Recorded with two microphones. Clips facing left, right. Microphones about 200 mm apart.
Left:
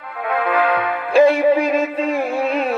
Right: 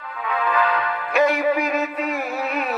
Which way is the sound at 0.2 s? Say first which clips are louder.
Left 4 dB; 60° left (ahead or behind).